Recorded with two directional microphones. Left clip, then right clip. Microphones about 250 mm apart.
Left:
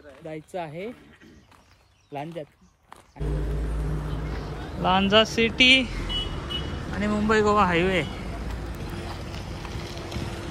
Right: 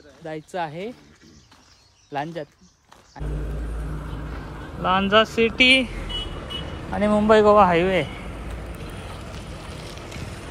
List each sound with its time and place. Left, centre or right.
0.2 s speech: centre
2.1 s a man's voice: centre
4.8 s speech: centre
6.9 s a man's voice: centre
7.3 s speech: centre
9.8 s vehicle: left